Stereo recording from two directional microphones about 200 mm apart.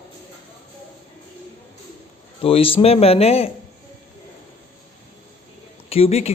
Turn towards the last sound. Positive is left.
turn(degrees=30)  # may be behind; listen again after turning